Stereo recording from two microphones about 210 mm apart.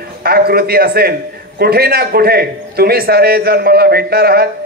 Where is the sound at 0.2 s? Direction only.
45° right (ahead or behind).